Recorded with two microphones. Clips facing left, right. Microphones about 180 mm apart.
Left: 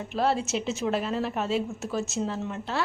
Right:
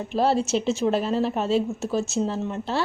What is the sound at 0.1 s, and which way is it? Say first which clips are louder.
A woman's voice: right 4 dB; 30° right (ahead or behind).